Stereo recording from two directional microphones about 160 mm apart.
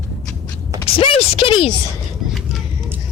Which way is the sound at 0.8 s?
35° left (ahead or behind).